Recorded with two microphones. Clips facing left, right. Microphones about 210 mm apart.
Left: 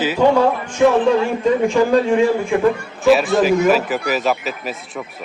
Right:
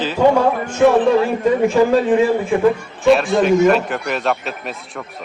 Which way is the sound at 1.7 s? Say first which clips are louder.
Right 1 dB; 5° right (ahead or behind).